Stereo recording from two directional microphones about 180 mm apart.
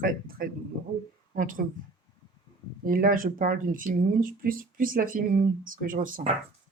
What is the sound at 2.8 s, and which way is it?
Speech, 50° right (ahead or behind).